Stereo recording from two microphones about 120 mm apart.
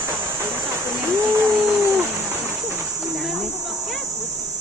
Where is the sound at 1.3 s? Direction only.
25° right (ahead or behind).